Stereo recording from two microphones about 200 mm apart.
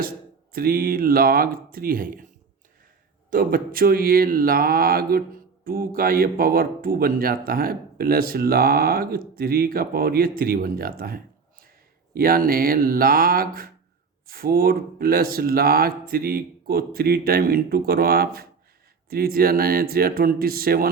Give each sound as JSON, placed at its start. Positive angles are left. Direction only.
{"t": 0.5, "sound": "speech", "side_deg": -50}
{"t": 3.2, "sound": "speech", "side_deg": -45}